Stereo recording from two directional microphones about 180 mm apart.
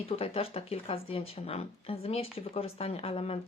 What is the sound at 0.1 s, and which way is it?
Speech, 30° left (ahead or behind).